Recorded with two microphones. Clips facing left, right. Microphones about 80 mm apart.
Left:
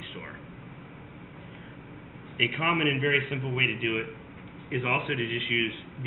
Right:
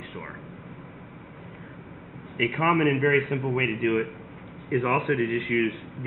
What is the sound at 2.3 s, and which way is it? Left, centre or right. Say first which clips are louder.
A man's voice: right 5 dB; centre.